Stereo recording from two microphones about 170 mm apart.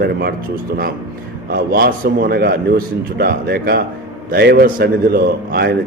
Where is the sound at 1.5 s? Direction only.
60° right (ahead or behind).